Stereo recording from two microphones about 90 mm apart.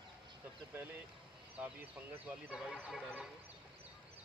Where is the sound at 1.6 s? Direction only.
20° right (ahead or behind); by 3.1 s 5° right (ahead or behind).